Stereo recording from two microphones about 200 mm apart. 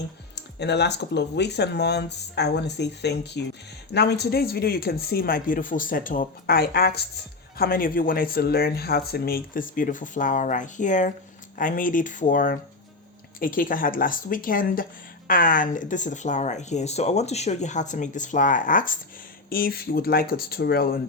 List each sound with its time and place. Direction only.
0.6 s speech: 55° left (ahead or behind)